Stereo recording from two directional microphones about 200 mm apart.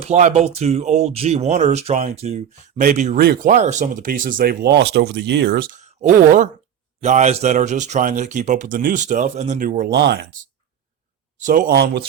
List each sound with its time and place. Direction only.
0.0 s speech: 35° right (ahead or behind); by 10.2 s 55° right (ahead or behind)
11.3 s speech: 40° right (ahead or behind)